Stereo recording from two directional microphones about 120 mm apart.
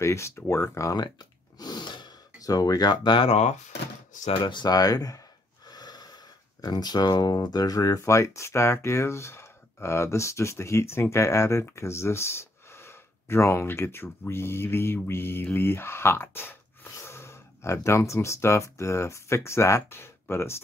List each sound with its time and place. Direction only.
0.0 s speech: 25° left (ahead or behind); by 3.3 s 40° left (ahead or behind)
3.3 s speech: 65° left (ahead or behind)
4.4 s speech: 40° left (ahead or behind); by 20.6 s 20° left (ahead or behind)